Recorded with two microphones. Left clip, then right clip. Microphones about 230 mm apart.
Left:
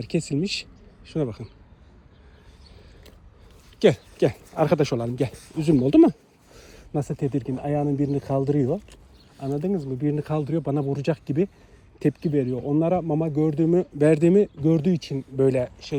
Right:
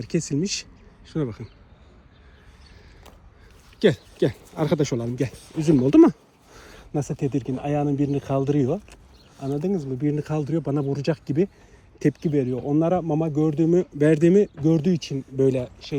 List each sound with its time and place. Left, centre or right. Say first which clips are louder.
0.0 s speech: even; centre
1.0 s speech: left 1 dB; right
3.8 s speech: left 1 dB; right
5.6 s speech: right 1 dB; centre
13.7 s speech: left 1 dB; right
14.2 s speech: right 1 dB; centre
15.4 s speech: even; right